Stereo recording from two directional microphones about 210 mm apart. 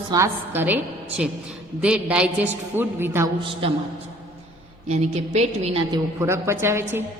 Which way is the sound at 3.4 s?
25° right (ahead or behind).